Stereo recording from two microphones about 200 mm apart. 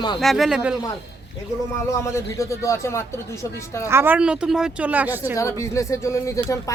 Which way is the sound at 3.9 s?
10° right (ahead or behind).